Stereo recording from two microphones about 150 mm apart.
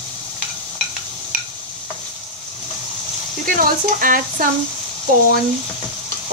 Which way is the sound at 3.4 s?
70° right (ahead or behind).